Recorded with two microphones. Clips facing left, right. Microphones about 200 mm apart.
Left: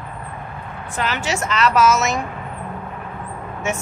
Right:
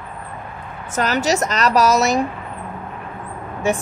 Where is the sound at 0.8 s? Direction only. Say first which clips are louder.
Right 5 dB; 40° right (ahead or behind).